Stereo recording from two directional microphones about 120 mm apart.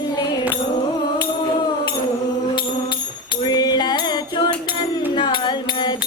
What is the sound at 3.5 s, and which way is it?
Music, 35° left (ahead or behind).